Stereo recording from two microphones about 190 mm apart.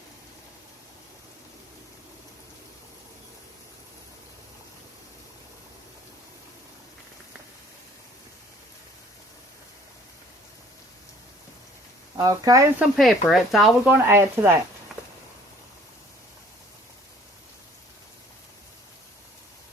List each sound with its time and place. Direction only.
12.1 s speech: 15° right (ahead or behind)
12.8 s speech: centre (ahead or behind)
14.9 s a sound: centre (ahead or behind)